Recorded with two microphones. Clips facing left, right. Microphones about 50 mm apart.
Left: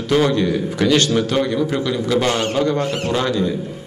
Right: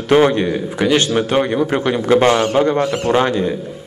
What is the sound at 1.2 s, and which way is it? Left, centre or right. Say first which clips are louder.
A man's voice: right 2 dB; right.